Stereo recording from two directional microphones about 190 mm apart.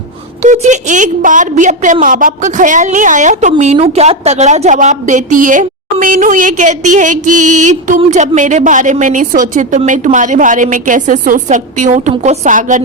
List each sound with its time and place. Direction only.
0.4 s a woman's voice: 40° right (ahead or behind)